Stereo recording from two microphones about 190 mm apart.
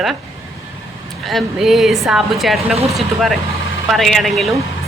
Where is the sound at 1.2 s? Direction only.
Centre (ahead or behind).